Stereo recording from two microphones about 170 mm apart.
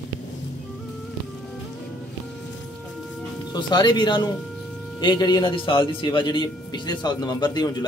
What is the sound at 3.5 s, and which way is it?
Speech, 25° left (ahead or behind).